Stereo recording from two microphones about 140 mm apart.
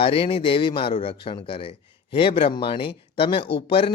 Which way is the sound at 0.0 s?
40° left (ahead or behind).